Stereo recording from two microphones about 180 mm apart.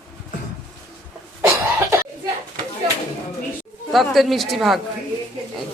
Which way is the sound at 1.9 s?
15° right (ahead or behind).